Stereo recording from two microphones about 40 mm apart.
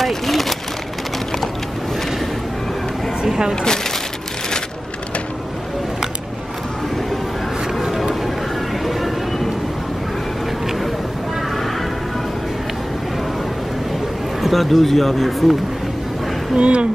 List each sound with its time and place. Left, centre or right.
0.0 s a sound: centre
3.2 s speech: centre
7.8 s a sound: centre
8.8 s music: centre
14.4 s speech: centre
16.5 s speech: right